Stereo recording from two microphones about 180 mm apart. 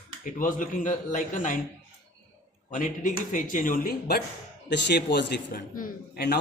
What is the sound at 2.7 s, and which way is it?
Speech, 45° left (ahead or behind).